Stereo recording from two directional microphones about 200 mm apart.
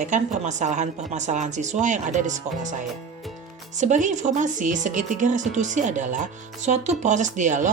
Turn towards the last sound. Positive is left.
turn(degrees=-40)  # may be behind; listen again after turning